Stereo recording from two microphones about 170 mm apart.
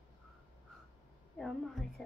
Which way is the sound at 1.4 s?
Centre (ahead or behind).